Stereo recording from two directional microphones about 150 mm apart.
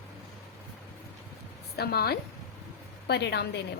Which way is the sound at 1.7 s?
90° left.